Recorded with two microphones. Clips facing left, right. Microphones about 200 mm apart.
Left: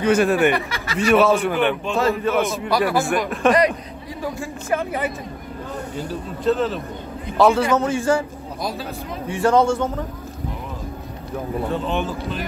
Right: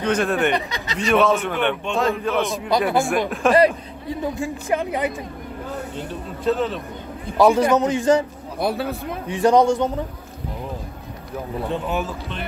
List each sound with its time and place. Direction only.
0.0 s speech: 10° left (ahead or behind)
0.6 s speech: 20° right (ahead or behind)
0.9 s a man's voice: 5° left (ahead or behind)
4.2 s a man's voice: 15° right (ahead or behind)
5.9 s a man's voice: centre (ahead or behind)
7.3 s a man's voice: 15° right (ahead or behind)
8.5 s a man's voice: 60° right (ahead or behind)
9.3 s a man's voice: 15° right (ahead or behind)
11.7 s a man's voice: 10° right (ahead or behind)
12.0 s a man's voice: centre (ahead or behind)